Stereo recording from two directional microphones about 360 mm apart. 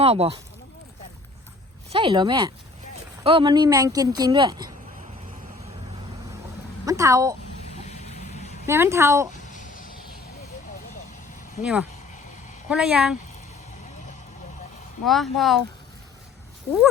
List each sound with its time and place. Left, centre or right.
0.0 s speech: centre
1.9 s speech: centre
6.8 s speech: centre
7.9 s vehicle: centre
8.6 s speech: centre
9.5 s a sound: left
11.6 s speech: centre
15.0 s speech: centre